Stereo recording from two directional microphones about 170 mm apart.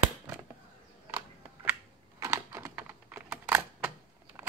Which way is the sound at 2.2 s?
15° right (ahead or behind).